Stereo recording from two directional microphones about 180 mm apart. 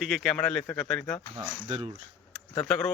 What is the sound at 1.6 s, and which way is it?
Speech, 35° right (ahead or behind).